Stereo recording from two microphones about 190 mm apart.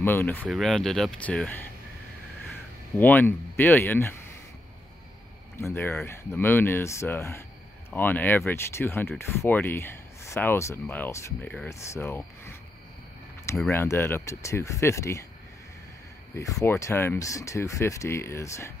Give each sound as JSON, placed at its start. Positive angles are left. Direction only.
{"t": 0.0, "sound": "speech", "side_deg": 10}
{"t": 3.0, "sound": "speech", "side_deg": 10}
{"t": 5.6, "sound": "speech", "side_deg": 15}
{"t": 13.6, "sound": "speech", "side_deg": 10}
{"t": 16.3, "sound": "speech", "side_deg": 15}